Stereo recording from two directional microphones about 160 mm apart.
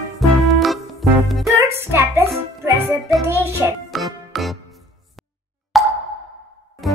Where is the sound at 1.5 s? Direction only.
15° right (ahead or behind).